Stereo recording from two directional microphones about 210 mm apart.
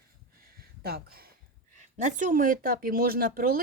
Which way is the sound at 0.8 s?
50° right (ahead or behind).